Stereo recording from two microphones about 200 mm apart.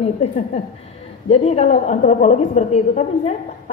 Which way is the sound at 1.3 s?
30° left (ahead or behind).